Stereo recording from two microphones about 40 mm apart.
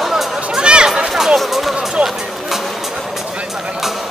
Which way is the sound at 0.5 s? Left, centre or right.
Right.